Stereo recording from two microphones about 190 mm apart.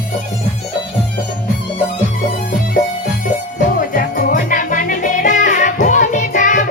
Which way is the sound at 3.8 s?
50° left (ahead or behind).